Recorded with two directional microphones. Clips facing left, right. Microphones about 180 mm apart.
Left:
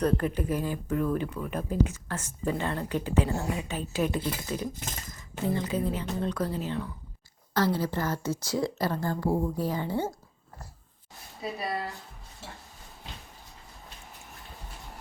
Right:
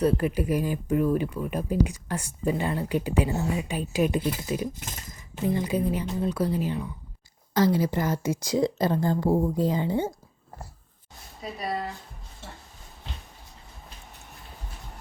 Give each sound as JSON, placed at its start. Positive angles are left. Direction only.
{"t": 0.0, "sound": "speech", "side_deg": -10}